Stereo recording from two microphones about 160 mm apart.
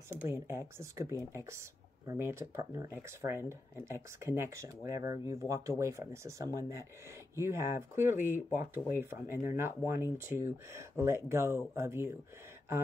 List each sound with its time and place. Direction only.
0.1 s speech: 15° right (ahead or behind)